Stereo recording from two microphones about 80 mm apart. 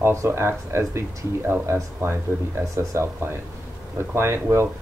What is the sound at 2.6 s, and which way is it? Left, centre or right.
Speech, right.